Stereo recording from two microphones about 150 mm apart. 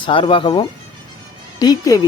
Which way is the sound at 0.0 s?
35° left (ahead or behind).